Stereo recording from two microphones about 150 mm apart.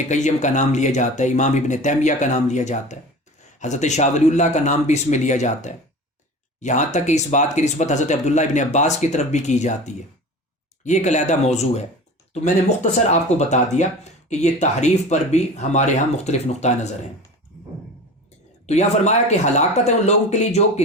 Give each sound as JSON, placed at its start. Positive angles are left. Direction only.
{"t": 0.1, "sound": "speech", "side_deg": 55}
{"t": 18.6, "sound": "speech", "side_deg": 50}